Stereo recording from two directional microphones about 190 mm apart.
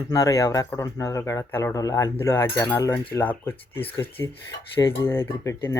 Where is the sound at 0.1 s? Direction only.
15° left (ahead or behind).